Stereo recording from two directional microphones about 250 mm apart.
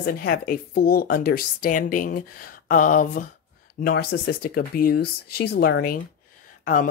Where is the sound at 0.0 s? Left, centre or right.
Left.